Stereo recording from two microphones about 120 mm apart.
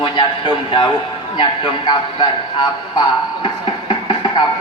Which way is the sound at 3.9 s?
45° left (ahead or behind).